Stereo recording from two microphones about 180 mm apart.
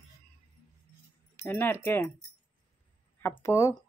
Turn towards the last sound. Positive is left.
turn(degrees=15)  # may be behind; listen again after turning